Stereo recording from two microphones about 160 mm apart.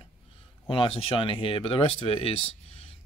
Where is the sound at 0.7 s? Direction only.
35° left (ahead or behind).